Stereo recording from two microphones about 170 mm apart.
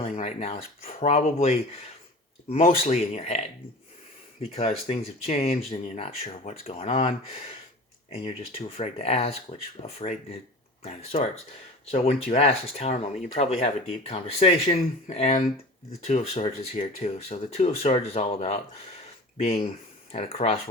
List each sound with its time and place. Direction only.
0.0 s speech: 40° left (ahead or behind)
4.5 s speech: 35° left (ahead or behind)